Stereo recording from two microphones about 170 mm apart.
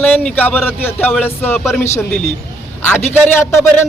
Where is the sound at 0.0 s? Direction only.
10° left (ahead or behind).